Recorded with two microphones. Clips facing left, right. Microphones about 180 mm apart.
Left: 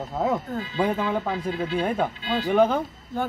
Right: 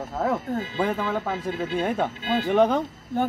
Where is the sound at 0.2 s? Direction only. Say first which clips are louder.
Even; 15° left (ahead or behind).